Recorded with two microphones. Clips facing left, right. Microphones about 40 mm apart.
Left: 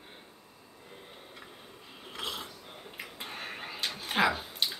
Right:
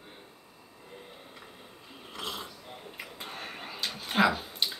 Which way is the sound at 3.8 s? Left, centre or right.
Left.